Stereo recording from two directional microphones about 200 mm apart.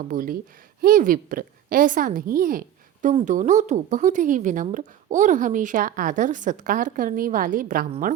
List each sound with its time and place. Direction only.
0.0 s a woman's voice: 45° right (ahead or behind)